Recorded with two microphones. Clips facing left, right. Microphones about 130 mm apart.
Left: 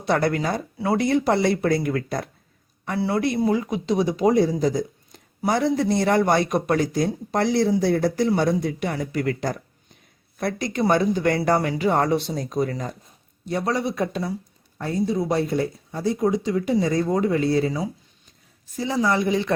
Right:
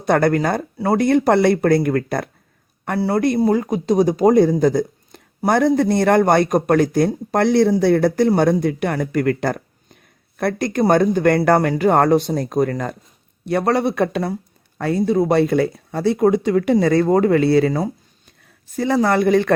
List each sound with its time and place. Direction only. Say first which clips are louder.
0.0 s speech: right 5 dB; 50° right (ahead or behind)
3.0 s a man's voice: right 5 dB; 45° right (ahead or behind)